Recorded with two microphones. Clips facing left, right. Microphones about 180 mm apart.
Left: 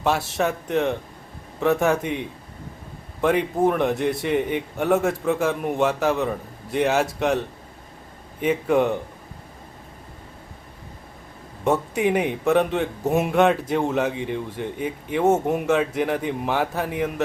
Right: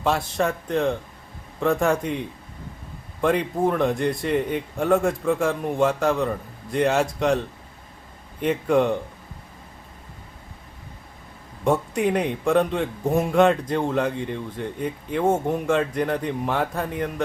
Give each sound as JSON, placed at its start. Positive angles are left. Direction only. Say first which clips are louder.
{"t": 0.0, "sound": "a man's voice", "louder": "even", "side_deg": 5}
{"t": 11.6, "sound": "a man's voice", "louder": "even", "side_deg": 5}
{"t": 13.1, "sound": "speech", "louder": "even", "side_deg": 20}
{"t": 13.3, "sound": "a man's voice", "louder": "right 1 dB", "side_deg": 5}